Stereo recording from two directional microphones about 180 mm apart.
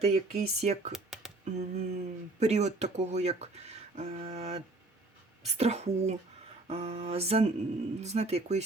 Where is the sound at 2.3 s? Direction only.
40° right (ahead or behind).